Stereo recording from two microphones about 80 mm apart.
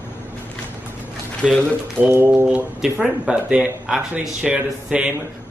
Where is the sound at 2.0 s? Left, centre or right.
Right.